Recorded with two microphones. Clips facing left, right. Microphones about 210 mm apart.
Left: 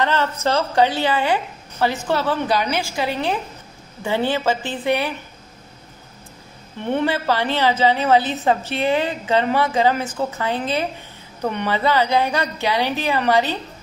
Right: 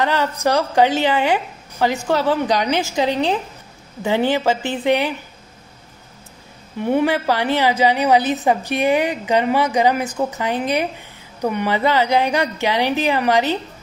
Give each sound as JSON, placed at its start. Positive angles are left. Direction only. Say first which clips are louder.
{"t": 0.0, "sound": "a woman's voice", "louder": "right 2 dB", "side_deg": -15}
{"t": 6.8, "sound": "a woman's voice", "louder": "right 3 dB", "side_deg": -10}